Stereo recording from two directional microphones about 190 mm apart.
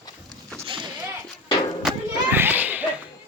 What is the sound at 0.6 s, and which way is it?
Whip, 25° right (ahead or behind).